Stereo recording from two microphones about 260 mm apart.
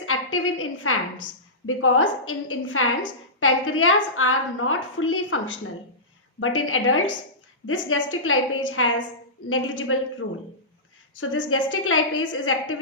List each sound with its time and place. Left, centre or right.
0.0 s a woman's voice: left